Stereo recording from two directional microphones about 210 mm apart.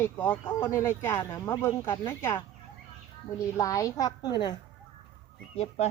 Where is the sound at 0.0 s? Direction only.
10° left (ahead or behind).